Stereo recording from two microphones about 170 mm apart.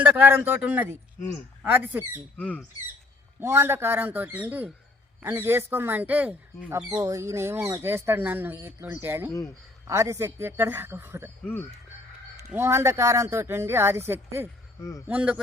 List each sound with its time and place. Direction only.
0.0 s speech: 10° right (ahead or behind)
2.4 s speech: 10° left (ahead or behind)
3.4 s speech: 15° right (ahead or behind)
12.5 s speech: 15° right (ahead or behind)
14.8 s a man's voice: 20° left (ahead or behind)
15.0 s speech: 5° right (ahead or behind)